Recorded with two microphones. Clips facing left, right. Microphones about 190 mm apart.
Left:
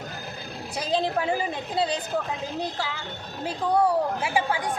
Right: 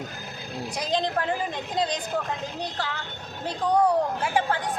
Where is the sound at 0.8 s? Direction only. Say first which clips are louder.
Left 2 dB; 5° left (ahead or behind).